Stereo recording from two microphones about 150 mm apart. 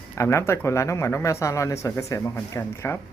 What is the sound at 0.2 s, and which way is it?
Speech, 20° left (ahead or behind).